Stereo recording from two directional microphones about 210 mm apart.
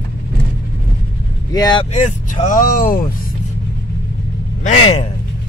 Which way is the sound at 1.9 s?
35° left (ahead or behind).